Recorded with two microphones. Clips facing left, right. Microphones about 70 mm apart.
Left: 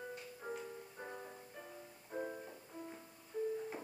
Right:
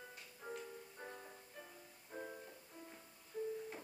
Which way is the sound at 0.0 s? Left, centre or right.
Centre.